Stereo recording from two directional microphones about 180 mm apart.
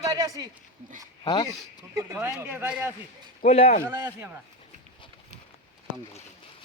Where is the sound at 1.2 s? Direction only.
25° left (ahead or behind).